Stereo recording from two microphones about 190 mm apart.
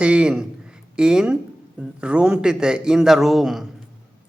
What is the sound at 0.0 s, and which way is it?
Speech, 5° right (ahead or behind).